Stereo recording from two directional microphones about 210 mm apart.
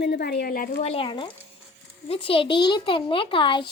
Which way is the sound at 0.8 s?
25° left (ahead or behind).